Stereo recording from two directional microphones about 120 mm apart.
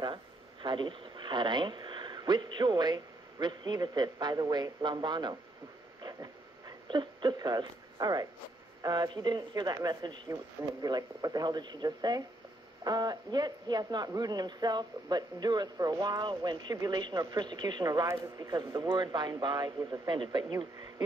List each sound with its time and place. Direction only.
0.0 s speech: 40° right (ahead or behind)
6.9 s a man's voice: 40° right (ahead or behind)